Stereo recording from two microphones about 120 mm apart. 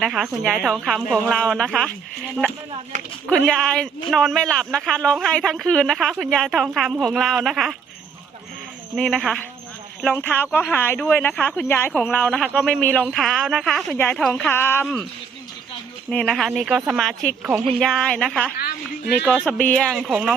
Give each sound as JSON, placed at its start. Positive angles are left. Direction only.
{"t": 0.0, "sound": "a man's voice", "side_deg": 0}
{"t": 3.2, "sound": "a man's voice", "side_deg": 5}
{"t": 9.0, "sound": "a man's voice", "side_deg": 5}
{"t": 10.1, "sound": "a man's voice", "side_deg": 15}
{"t": 14.5, "sound": "speech", "side_deg": 20}
{"t": 16.0, "sound": "a man's voice", "side_deg": 5}
{"t": 19.2, "sound": "speech", "side_deg": -10}
{"t": 19.5, "sound": "a man's voice", "side_deg": 10}